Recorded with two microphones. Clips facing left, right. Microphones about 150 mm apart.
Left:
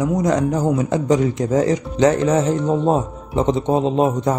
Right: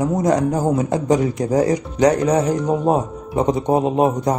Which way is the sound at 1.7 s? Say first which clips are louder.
Even; 25° left (ahead or behind).